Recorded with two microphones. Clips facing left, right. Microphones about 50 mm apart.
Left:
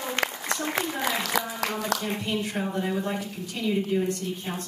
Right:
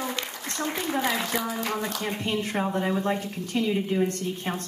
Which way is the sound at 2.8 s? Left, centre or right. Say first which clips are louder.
Right 2 dB; right.